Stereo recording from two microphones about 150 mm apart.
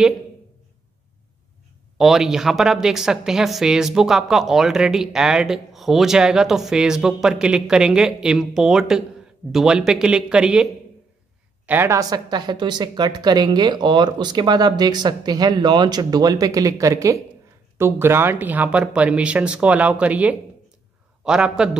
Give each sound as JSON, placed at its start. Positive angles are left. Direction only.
{"t": 2.0, "sound": "a woman's voice", "side_deg": 0}